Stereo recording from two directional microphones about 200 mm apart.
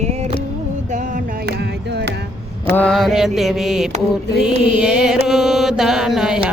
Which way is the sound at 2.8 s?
Centre (ahead or behind).